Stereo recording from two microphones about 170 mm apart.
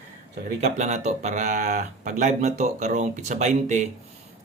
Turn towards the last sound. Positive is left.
turn(degrees=-45)  # may be behind; listen again after turning